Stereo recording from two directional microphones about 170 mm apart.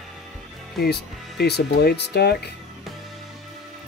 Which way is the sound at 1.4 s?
70° left (ahead or behind).